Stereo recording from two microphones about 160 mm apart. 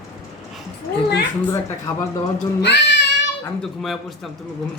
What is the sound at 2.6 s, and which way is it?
Cat, 90° left.